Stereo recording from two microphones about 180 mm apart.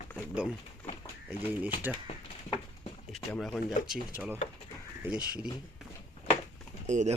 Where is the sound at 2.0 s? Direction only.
25° left (ahead or behind).